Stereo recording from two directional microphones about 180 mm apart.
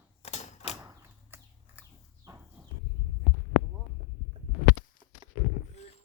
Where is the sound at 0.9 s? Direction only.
10° right (ahead or behind).